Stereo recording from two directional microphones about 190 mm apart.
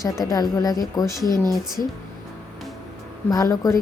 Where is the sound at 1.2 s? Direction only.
20° right (ahead or behind).